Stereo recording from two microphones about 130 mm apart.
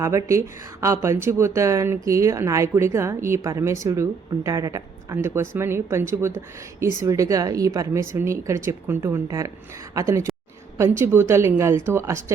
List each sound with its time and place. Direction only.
0.0 s a woman's voice: 20° right (ahead or behind)